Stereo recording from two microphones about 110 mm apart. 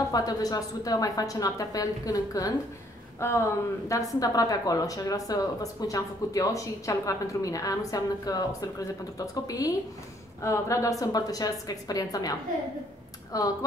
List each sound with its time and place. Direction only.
0.1 s a woman's voice: 35° left (ahead or behind)